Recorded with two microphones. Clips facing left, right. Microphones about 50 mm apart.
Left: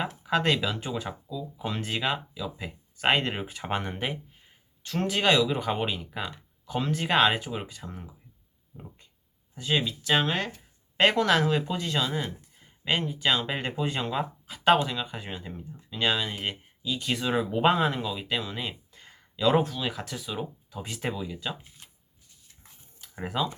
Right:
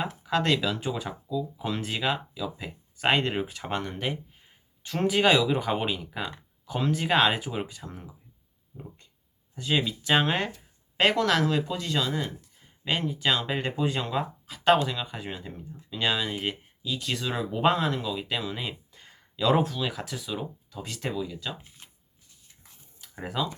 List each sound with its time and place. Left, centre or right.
0.2 s speech: centre
4.8 s speech: centre
9.6 s speech: centre
10.2 s speech: centre
10.9 s speech: centre
20.7 s speech: centre
23.0 s a sound: centre